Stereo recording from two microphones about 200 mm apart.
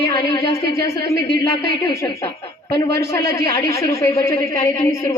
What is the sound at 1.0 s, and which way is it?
Speech, 15° left (ahead or behind).